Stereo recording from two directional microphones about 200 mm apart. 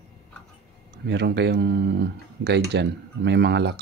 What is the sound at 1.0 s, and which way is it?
Speech, 55° right (ahead or behind).